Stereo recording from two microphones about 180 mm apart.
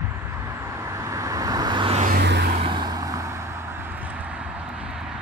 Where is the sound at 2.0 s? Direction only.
60° right (ahead or behind).